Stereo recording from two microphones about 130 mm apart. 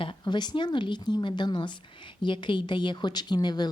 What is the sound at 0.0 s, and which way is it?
Speech, 35° left (ahead or behind).